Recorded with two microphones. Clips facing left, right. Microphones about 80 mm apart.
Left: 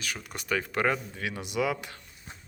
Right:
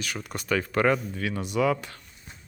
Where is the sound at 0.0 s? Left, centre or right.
Centre.